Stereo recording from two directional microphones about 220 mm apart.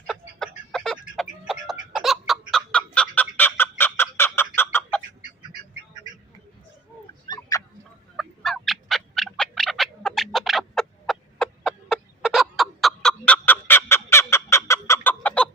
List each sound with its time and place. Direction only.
0.1 s a sound: 5° left (ahead or behind)
7.3 s chicken: 15° left (ahead or behind)
8.1 s turkey: centre (ahead or behind)